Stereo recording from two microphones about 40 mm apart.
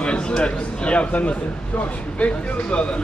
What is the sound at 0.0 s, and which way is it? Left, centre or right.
A man's voice, left.